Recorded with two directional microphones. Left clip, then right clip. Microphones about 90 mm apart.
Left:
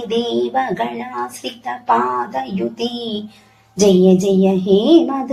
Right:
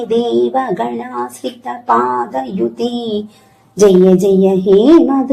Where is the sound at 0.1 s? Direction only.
35° right (ahead or behind).